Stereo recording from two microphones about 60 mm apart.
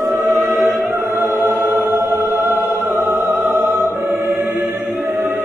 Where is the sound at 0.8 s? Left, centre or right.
Right.